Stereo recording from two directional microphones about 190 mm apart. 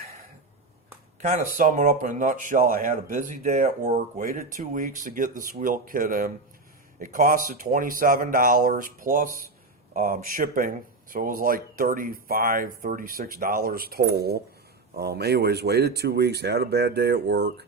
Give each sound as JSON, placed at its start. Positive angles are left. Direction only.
{"t": 1.2, "sound": "speech", "side_deg": -40}